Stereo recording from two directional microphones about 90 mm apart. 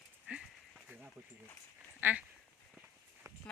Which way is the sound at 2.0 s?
20° right (ahead or behind).